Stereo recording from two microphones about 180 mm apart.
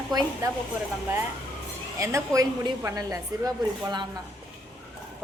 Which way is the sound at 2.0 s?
15° right (ahead or behind).